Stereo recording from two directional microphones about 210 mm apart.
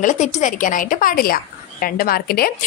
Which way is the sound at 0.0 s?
35° left (ahead or behind).